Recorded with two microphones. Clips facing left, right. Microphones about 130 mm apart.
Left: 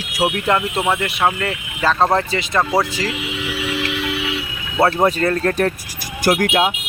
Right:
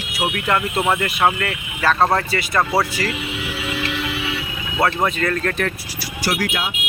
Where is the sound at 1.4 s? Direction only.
15° left (ahead or behind).